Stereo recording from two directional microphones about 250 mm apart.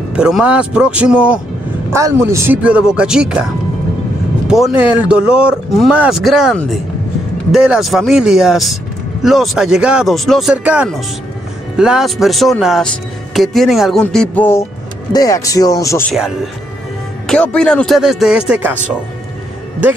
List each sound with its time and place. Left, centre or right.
0.1 s speech: centre
4.5 s speech: centre
16.1 s speech: centre